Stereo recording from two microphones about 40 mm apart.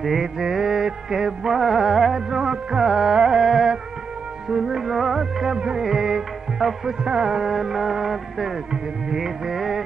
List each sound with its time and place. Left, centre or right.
0.0 s music: centre
0.4 s music: centre
2.3 s music: centre